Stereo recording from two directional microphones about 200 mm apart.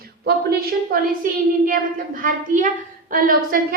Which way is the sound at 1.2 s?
45° right (ahead or behind).